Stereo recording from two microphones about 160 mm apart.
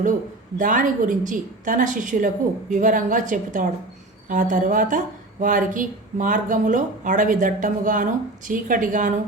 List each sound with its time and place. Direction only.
0.6 s speech: 55° right (ahead or behind)